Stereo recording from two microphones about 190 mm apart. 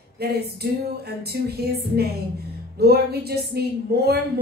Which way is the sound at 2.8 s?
55° right (ahead or behind).